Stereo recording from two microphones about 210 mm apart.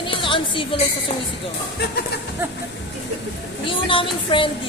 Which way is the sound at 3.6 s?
25° left (ahead or behind).